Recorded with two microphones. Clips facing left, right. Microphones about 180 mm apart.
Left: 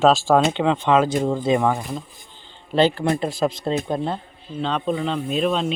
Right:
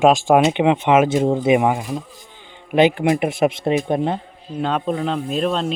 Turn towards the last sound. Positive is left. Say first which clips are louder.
# right 1 dB
turn(degrees=0)  # may be behind; listen again after turning